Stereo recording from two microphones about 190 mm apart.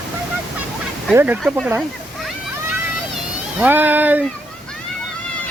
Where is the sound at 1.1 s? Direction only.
10° right (ahead or behind).